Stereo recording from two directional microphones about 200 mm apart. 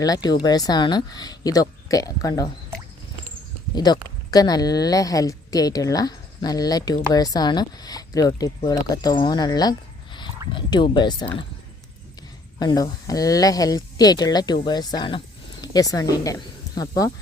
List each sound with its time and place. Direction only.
0.0 s speech: 20° left (ahead or behind)
3.8 s speech: 20° left (ahead or behind)
12.5 s speech: 20° left (ahead or behind)